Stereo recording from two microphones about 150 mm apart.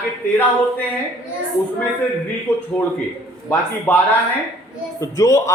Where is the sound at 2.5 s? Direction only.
15° left (ahead or behind).